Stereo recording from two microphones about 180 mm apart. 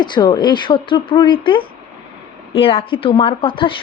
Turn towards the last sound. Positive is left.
turn(degrees=30)  # may be behind; listen again after turning